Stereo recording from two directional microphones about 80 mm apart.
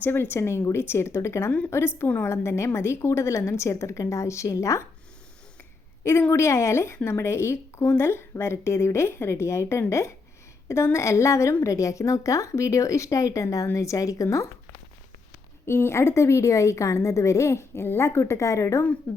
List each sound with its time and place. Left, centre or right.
0.0 s a woman's voice: left
6.3 s a woman's voice: left
15.6 s a woman's voice: left